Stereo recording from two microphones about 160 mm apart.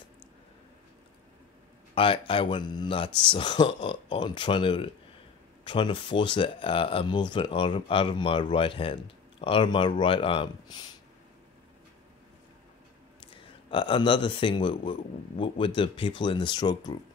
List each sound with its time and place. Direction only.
2.0 s speech: 35° left (ahead or behind)
13.2 s speech: 30° left (ahead or behind)